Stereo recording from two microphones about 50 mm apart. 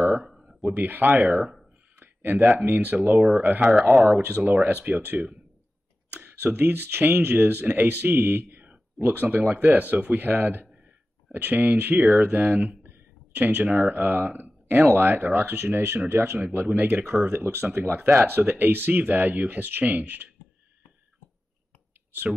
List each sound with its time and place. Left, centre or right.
0.3 s a sound: centre
0.7 s speech: right
2.0 s a sound: right
2.6 s speech: right
3.6 s speech: centre
4.1 s speech: right
6.2 s speech: right
16.1 s speech: right
16.3 s speech: right
17.0 s speech: right
17.6 s speech: right